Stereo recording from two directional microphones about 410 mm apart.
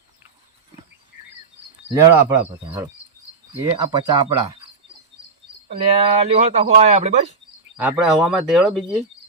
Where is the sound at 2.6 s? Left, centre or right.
Centre.